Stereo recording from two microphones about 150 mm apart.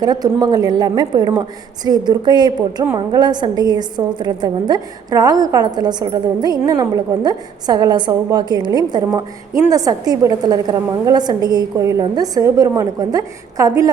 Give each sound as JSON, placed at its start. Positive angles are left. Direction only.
{"t": 0.0, "sound": "a woman's voice", "side_deg": -25}